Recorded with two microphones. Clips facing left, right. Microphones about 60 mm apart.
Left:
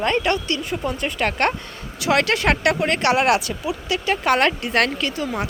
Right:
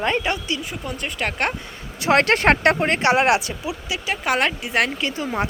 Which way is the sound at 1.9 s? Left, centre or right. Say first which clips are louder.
Right 2 dB; right.